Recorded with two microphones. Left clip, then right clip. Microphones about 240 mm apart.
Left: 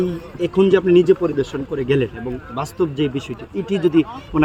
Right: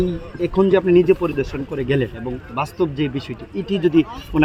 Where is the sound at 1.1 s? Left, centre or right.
Centre.